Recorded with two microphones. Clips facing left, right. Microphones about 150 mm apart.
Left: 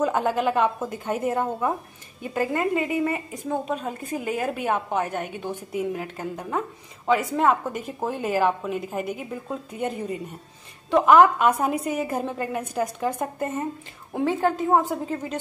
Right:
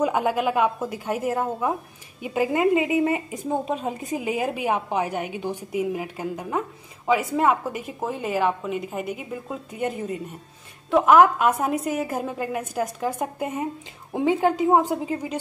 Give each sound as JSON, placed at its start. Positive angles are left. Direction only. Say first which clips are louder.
{"t": 0.0, "sound": "a woman's voice", "louder": "even", "side_deg": -10}
{"t": 2.2, "sound": "a woman's voice", "louder": "right 3 dB", "side_deg": -15}
{"t": 4.2, "sound": "a woman's voice", "louder": "right 1 dB", "side_deg": -10}